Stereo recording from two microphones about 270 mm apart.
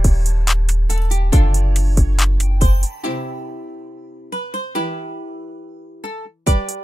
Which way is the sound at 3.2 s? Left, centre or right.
Left.